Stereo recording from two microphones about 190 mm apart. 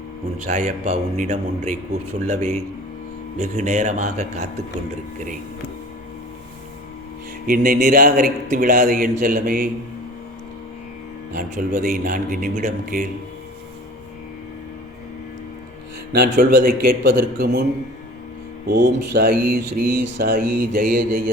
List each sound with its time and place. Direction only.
0.4 s a man's voice: 40° right (ahead or behind)
7.4 s a man's voice: 45° right (ahead or behind)
11.3 s a man's voice: 45° right (ahead or behind)
16.1 s a man's voice: 50° right (ahead or behind)
18.7 s a man's voice: 55° right (ahead or behind)